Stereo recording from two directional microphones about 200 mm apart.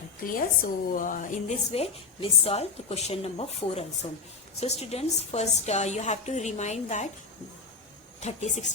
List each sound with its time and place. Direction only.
0.3 s a woman's voice: 40° left (ahead or behind)
8.2 s a woman's voice: 35° left (ahead or behind)